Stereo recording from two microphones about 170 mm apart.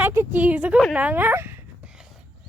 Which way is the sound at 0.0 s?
10° right (ahead or behind).